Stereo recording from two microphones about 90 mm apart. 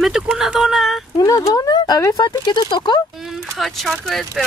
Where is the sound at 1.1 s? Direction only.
40° left (ahead or behind).